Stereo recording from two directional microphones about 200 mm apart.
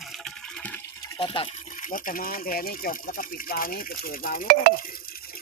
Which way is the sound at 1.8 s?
45° left (ahead or behind).